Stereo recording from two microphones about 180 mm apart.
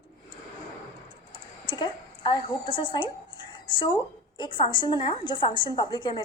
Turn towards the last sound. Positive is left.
turn(degrees=25)  # may be behind; listen again after turning